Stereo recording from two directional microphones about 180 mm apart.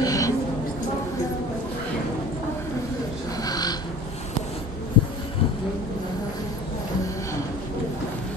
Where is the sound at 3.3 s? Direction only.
20° left (ahead or behind).